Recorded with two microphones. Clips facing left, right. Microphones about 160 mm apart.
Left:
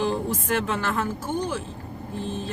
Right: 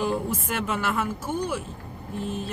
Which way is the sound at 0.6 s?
10° right (ahead or behind).